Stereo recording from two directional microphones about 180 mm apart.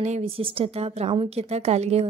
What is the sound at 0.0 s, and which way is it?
A woman's voice, 35° right (ahead or behind).